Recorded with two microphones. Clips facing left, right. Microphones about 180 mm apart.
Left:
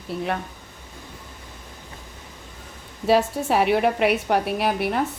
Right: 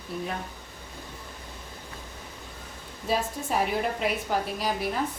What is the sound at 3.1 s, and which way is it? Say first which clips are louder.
A woman's voice: left 9 dB; 75° left (ahead or behind).